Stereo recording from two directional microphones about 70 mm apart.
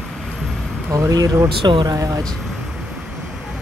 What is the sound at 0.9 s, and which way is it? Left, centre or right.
Speech, right.